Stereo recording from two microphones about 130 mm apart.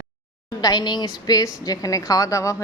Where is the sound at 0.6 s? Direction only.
30° left (ahead or behind).